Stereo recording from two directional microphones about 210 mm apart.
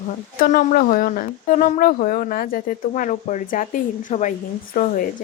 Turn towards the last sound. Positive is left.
turn(degrees=40)  # may be behind; listen again after turning